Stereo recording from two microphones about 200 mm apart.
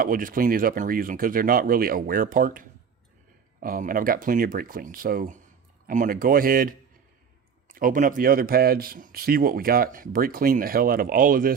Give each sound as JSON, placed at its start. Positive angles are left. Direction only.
{"t": 0.0, "sound": "speech", "side_deg": -45}